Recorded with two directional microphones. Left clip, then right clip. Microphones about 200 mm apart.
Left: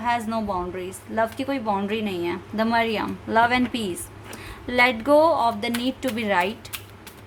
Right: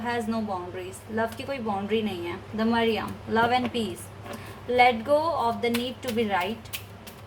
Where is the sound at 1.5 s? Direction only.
55° left (ahead or behind).